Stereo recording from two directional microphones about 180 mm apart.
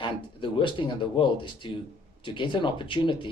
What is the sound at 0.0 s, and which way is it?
Speech, 25° left (ahead or behind).